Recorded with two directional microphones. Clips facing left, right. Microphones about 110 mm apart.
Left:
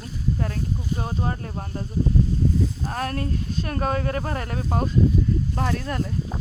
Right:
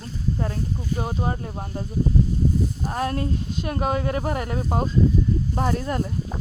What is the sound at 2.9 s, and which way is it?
Speech, 25° right (ahead or behind).